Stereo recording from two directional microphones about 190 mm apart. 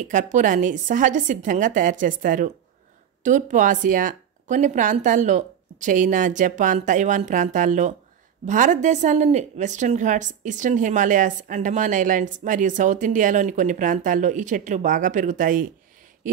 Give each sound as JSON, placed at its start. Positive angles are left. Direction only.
{"t": 0.1, "sound": "a woman's voice", "side_deg": -40}